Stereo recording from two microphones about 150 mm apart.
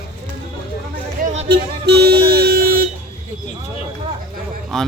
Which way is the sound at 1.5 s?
90° right.